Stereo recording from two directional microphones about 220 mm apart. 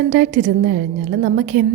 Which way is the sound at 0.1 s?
40° right (ahead or behind).